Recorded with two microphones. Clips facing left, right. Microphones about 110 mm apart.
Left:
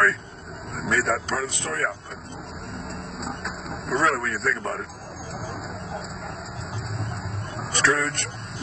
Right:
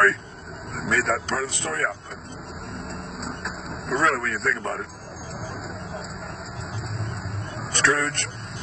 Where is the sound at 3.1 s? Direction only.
Centre (ahead or behind).